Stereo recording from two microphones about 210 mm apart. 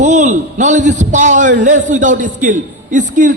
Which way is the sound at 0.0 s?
35° right (ahead or behind).